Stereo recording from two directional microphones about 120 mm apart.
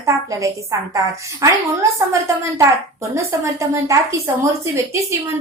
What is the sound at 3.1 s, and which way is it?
Speech, 25° right (ahead or behind).